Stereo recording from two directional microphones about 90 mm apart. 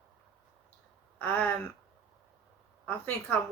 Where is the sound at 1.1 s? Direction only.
20° left (ahead or behind).